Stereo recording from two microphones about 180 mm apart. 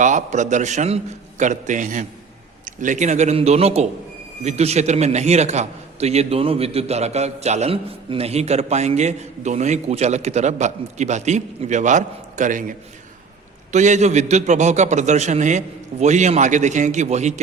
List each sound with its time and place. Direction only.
0.0 s a man's voice: 45° right (ahead or behind)
13.7 s a man's voice: 40° right (ahead or behind)